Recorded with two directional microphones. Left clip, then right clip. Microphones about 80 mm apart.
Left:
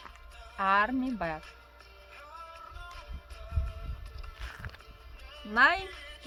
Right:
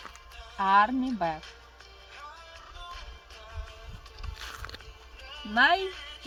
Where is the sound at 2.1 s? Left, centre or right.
Left.